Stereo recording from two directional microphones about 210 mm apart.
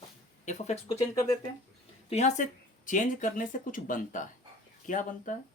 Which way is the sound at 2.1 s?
35° left (ahead or behind).